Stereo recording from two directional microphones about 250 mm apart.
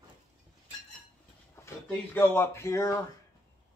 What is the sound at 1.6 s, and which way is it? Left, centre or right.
Speech, centre.